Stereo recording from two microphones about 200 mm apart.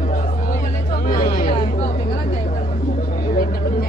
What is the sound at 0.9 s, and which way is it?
Chatter, 45° left (ahead or behind).